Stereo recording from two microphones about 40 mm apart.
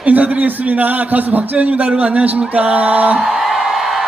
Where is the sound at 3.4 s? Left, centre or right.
Centre.